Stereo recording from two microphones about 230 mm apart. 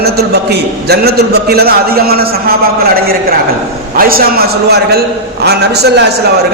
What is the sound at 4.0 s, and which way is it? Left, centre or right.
A man's voice, right.